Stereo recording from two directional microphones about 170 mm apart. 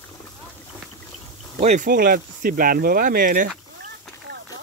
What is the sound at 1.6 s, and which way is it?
Speech, 50° right (ahead or behind).